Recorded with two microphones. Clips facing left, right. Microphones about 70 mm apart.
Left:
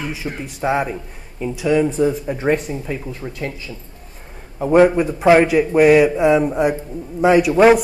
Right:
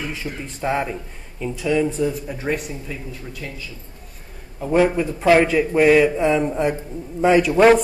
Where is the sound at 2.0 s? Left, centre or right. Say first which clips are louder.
Left 5 dB; left.